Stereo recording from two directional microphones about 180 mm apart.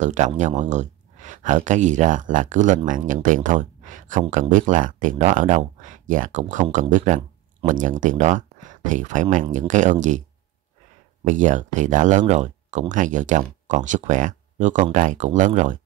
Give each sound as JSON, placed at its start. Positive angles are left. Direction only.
{"t": 0.0, "sound": "speech", "side_deg": -40}
{"t": 11.2, "sound": "speech", "side_deg": -45}